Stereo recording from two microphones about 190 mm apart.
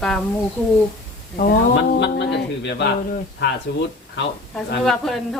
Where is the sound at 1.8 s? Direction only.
65° left (ahead or behind).